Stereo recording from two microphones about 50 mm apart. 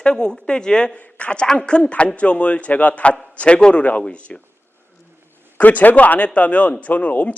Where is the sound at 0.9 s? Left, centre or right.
Left.